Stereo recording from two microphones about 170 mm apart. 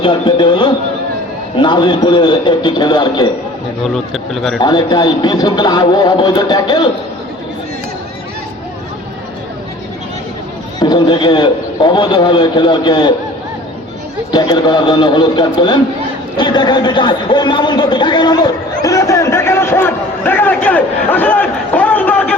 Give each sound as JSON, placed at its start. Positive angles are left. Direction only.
{"t": 0.0, "sound": "a sound", "side_deg": 30}
{"t": 1.5, "sound": "a man's voice", "side_deg": 25}
{"t": 3.9, "sound": "speech", "side_deg": 0}
{"t": 4.6, "sound": "a man's voice", "side_deg": 25}
{"t": 10.8, "sound": "a man's voice", "side_deg": 25}
{"t": 14.3, "sound": "a man's voice", "side_deg": 25}